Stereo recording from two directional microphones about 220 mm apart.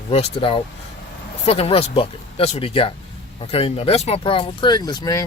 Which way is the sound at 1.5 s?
25° left (ahead or behind).